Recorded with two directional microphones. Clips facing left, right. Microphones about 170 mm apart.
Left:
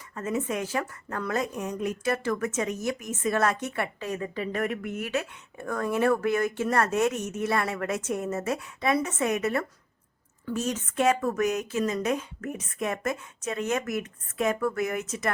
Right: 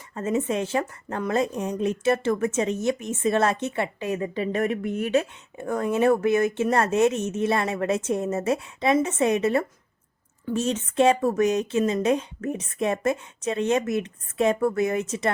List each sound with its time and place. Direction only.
0.1 s speech: 25° right (ahead or behind)